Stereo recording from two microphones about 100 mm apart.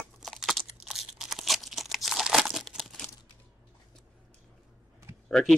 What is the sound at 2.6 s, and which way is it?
Crumpling, 5° left (ahead or behind).